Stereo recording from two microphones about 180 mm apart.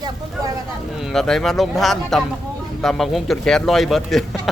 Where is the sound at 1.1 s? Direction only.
Centre (ahead or behind).